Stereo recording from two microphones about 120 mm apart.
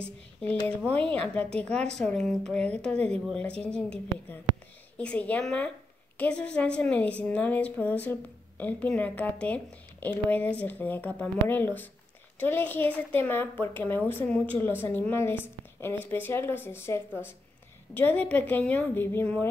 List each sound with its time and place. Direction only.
0.0 s a woman's voice: 10° left (ahead or behind)